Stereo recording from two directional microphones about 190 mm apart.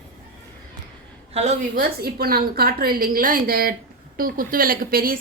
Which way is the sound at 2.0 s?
55° right (ahead or behind).